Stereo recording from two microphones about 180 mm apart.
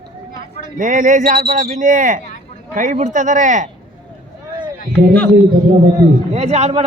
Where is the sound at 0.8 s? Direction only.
45° right (ahead or behind).